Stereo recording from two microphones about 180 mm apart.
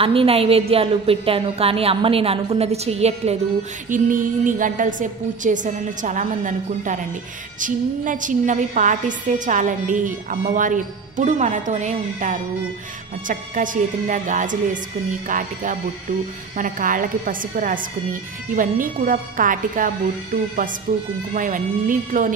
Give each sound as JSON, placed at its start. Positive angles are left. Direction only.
{"t": 0.0, "sound": "a woman's voice", "side_deg": -30}
{"t": 3.9, "sound": "a woman's voice", "side_deg": -45}
{"t": 21.4, "sound": "a woman's voice", "side_deg": -45}